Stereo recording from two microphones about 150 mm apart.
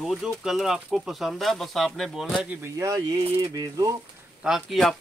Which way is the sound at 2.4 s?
20° right (ahead or behind).